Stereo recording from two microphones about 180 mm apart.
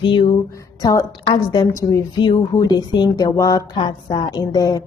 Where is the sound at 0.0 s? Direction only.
25° left (ahead or behind).